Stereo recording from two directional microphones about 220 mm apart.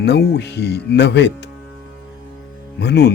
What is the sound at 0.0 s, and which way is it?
Speech, 50° left (ahead or behind).